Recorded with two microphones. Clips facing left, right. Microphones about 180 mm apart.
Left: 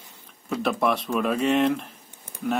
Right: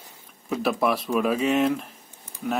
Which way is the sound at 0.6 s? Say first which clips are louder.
Even; 5° right (ahead or behind).